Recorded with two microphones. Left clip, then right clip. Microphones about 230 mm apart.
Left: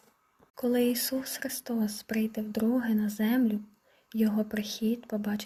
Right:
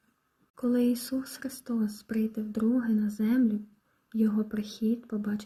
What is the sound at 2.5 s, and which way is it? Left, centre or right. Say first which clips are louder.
Speech: even; left.